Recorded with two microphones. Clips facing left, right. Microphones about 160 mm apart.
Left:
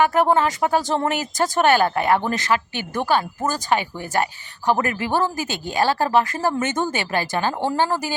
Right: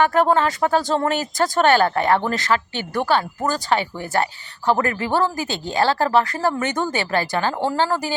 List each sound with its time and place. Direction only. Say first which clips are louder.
0.0 s speech: even; 15° left (ahead or behind)